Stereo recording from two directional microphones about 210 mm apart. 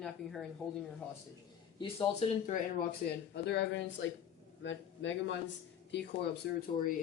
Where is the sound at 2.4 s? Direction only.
50° left (ahead or behind).